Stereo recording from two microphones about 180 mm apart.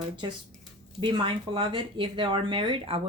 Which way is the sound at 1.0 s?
25° right (ahead or behind).